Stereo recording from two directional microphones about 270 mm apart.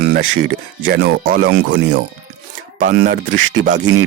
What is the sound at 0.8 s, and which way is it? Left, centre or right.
Speech, right.